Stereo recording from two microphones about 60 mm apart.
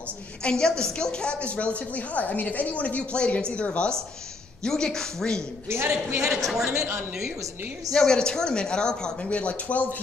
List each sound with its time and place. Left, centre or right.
0.4 s a woman's voice: centre
5.7 s a man's voice: right
6.3 s speech: centre
6.7 s a man's voice: right
7.9 s speech: centre